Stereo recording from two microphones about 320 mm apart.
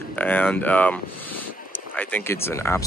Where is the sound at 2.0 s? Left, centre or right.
Centre.